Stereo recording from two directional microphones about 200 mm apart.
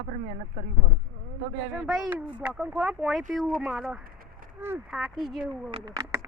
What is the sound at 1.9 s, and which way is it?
Speech, centre (ahead or behind).